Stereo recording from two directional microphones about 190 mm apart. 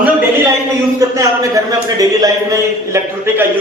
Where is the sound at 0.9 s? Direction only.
15° right (ahead or behind).